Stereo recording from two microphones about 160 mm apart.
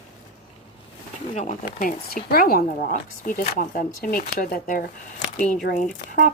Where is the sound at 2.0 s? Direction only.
65° left (ahead or behind).